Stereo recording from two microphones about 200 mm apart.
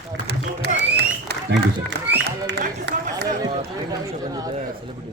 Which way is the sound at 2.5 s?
60° right (ahead or behind).